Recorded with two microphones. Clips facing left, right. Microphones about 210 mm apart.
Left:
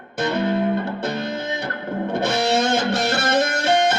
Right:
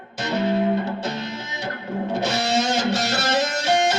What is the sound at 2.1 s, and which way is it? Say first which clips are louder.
Music: left 3 dB; 55° left (ahead or behind).